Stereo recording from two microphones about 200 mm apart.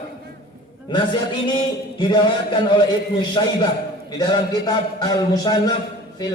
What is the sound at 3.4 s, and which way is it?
Speech, 20° left (ahead or behind).